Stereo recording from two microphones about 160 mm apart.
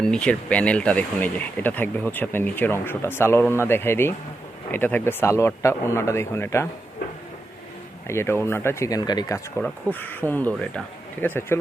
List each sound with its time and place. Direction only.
0.0 s speech: 5° left (ahead or behind)
8.0 s speech: 15° left (ahead or behind)
9.6 s speech: 10° left (ahead or behind)